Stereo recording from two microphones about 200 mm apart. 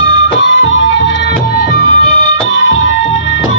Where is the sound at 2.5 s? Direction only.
70° left (ahead or behind).